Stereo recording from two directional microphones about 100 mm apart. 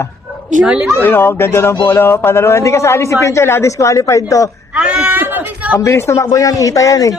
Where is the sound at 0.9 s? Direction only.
20° left (ahead or behind).